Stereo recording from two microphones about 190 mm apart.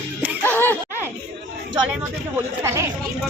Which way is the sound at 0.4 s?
10° left (ahead or behind).